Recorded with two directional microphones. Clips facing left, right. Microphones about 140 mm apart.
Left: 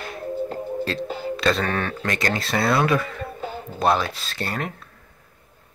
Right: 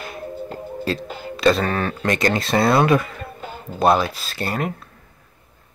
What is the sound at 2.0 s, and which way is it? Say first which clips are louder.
Speech: right 8 dB; 20° right (ahead or behind).